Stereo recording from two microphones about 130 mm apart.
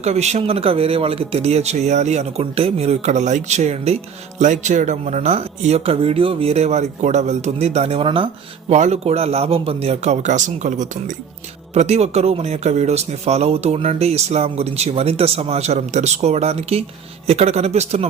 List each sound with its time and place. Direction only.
0.0 s a man's voice: 60° right (ahead or behind)
4.4 s a man's voice: 70° right (ahead or behind); by 8.3 s 40° right (ahead or behind)
8.7 s a man's voice: 55° right (ahead or behind)
11.7 s a man's voice: 55° right (ahead or behind)